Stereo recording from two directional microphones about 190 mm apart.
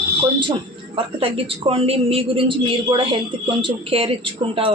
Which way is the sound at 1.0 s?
30° right (ahead or behind).